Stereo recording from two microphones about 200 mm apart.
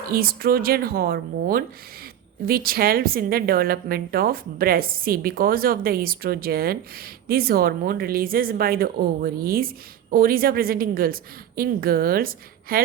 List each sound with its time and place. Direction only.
0.1 s speech: 50° right (ahead or behind)